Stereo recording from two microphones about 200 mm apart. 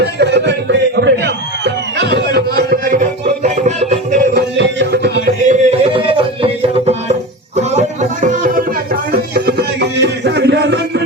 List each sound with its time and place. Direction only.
0.0 s music: 60° right (ahead or behind); by 4.2 s 35° right (ahead or behind)
4.4 s music: 60° right (ahead or behind)
5.5 s music: 30° right (ahead or behind); by 11.0 s 55° right (ahead or behind)